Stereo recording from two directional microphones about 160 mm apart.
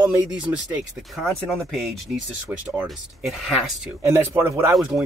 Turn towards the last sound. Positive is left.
turn(degrees=-5)  # may be behind; listen again after turning